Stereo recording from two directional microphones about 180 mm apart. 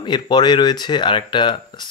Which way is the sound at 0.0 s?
25° left (ahead or behind).